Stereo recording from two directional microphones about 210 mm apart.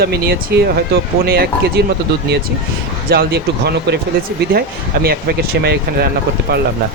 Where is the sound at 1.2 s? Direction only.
45° right (ahead or behind).